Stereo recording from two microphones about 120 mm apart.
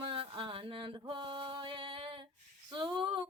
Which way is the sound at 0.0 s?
50° right (ahead or behind).